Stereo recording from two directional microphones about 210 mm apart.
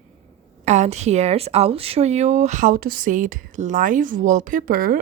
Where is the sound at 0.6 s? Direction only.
35° right (ahead or behind).